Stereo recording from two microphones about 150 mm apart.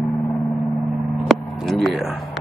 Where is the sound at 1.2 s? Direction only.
Centre (ahead or behind).